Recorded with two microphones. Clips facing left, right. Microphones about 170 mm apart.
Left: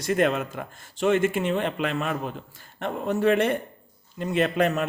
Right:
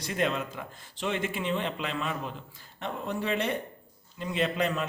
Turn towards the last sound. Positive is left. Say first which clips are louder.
# left 6 dB
turn(degrees=55)  # may be behind; listen again after turning